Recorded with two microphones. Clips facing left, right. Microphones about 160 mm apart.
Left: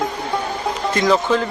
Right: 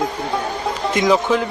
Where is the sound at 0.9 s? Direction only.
15° right (ahead or behind).